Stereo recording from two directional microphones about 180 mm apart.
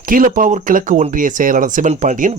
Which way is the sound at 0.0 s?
50° right (ahead or behind).